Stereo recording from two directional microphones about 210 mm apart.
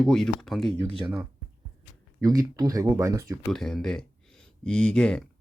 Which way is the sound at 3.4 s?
Centre (ahead or behind).